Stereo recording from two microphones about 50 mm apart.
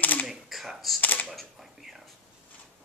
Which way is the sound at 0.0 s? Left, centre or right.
Left.